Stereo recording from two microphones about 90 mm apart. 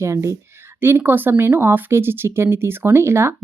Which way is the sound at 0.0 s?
30° right (ahead or behind).